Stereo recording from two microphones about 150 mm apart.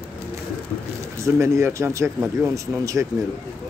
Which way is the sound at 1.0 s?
20° right (ahead or behind).